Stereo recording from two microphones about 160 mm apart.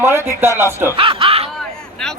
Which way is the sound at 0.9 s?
35° right (ahead or behind).